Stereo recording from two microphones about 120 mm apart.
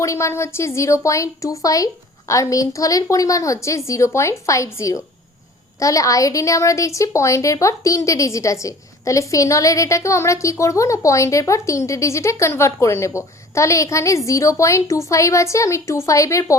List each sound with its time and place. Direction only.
0.0 s a woman's voice: 25° left (ahead or behind)